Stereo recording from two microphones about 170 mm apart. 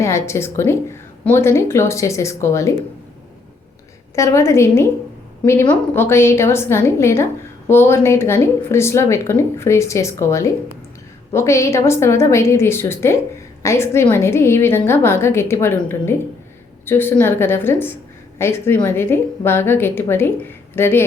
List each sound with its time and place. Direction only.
0.0 s speech: 15° left (ahead or behind)
4.1 s speech: 15° left (ahead or behind)